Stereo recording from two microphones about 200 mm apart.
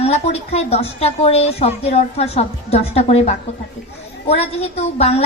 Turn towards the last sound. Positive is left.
turn(degrees=30)  # may be behind; listen again after turning